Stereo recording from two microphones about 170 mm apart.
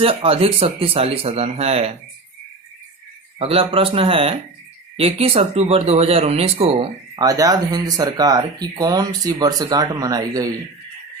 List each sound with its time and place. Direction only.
0.0 s speech: 35° right (ahead or behind)
3.3 s speech: 35° right (ahead or behind)
7.2 s speech: 20° right (ahead or behind)